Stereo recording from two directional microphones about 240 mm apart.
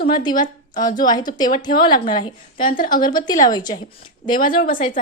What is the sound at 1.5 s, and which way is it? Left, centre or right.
Speech, centre.